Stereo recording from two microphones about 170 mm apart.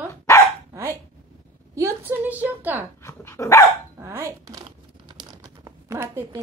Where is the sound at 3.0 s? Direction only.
15° left (ahead or behind).